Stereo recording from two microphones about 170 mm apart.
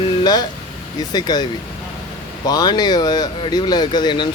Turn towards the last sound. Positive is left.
turn(degrees=25)  # may be behind; listen again after turning